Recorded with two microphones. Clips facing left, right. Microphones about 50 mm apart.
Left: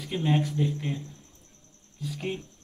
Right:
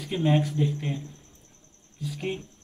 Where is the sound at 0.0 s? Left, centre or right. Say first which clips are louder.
Right 2 dB; centre.